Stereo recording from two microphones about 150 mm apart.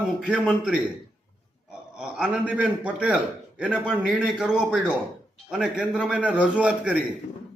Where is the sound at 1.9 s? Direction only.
5° right (ahead or behind).